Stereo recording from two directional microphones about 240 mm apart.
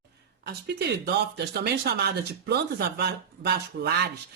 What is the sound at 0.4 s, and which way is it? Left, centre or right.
Speech, right.